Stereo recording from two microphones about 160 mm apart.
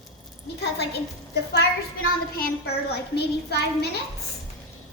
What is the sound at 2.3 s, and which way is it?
A woman's voice, 75° left (ahead or behind).